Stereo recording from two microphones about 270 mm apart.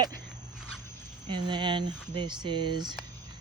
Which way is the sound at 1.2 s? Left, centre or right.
Centre.